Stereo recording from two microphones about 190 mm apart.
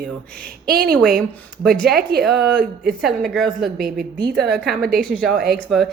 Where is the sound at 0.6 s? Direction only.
50° right (ahead or behind).